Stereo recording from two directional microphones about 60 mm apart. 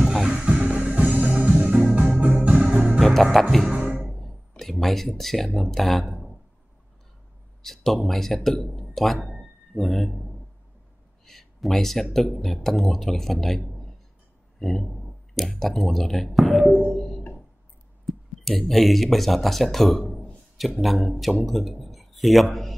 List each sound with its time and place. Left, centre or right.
0.0 s music: centre
0.4 s music: centre
3.0 s music: centre
3.7 s music: centre
4.0 s a sound: centre
7.6 s speech: centre
9.4 s a sound: centre
11.2 s speech: centre
14.6 s speech: centre
16.8 s music: centre
18.0 s a man's voice: centre